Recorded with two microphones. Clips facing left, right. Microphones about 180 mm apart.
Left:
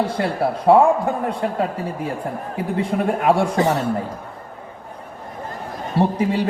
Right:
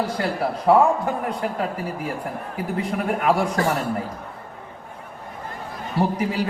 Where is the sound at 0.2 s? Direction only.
30° left (ahead or behind).